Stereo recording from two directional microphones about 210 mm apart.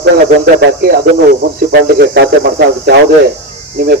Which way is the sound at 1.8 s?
50° right (ahead or behind).